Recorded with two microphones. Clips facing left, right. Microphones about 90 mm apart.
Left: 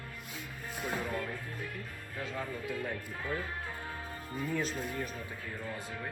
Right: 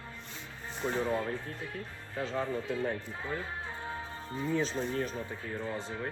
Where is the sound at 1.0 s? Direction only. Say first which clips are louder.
Right 5 dB; 30° right (ahead or behind).